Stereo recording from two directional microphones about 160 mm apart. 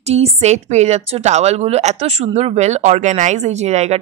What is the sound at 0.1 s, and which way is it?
A woman's voice, 40° right (ahead or behind).